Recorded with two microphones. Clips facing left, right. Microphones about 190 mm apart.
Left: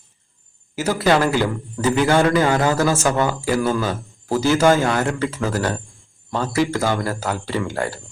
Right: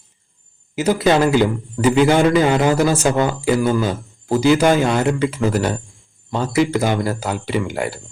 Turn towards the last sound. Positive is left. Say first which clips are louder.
# right 2 dB
turn(degrees=-15)  # may be behind; listen again after turning